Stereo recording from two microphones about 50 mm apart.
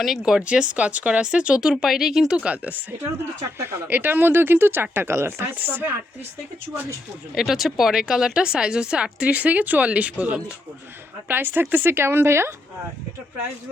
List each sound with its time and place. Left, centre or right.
0.0 s speech: centre
0.4 s speech: right
1.8 s speech: centre; by 2.8 s right
3.8 s speech: right
7.3 s speech: centre
9.3 s speech: right
11.3 s speech: right